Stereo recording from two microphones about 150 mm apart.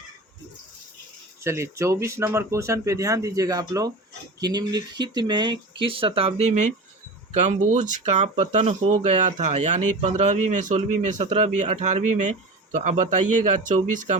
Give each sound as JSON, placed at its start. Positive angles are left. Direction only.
{"t": 1.5, "sound": "speech", "side_deg": -20}
{"t": 6.4, "sound": "speech", "side_deg": -50}